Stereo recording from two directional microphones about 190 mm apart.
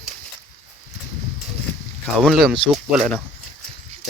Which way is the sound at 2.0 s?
Centre (ahead or behind).